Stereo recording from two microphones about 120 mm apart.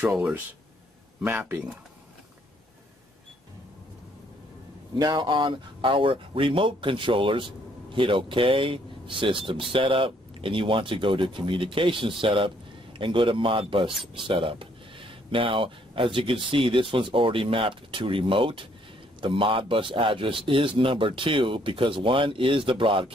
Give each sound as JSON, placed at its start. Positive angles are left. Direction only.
{"t": 4.9, "sound": "speech", "side_deg": -35}